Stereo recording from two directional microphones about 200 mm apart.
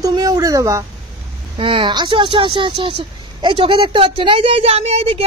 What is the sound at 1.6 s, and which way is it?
A woman's voice, 25° right (ahead or behind).